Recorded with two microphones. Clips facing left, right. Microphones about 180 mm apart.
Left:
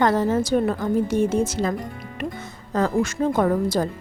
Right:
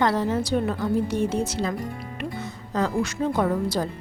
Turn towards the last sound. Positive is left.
turn(degrees=50)  # may be behind; listen again after turning